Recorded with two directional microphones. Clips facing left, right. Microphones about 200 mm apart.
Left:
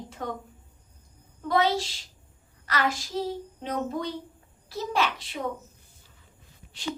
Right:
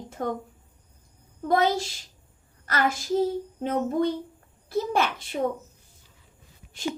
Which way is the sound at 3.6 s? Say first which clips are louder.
Right 6 dB; 50° right (ahead or behind).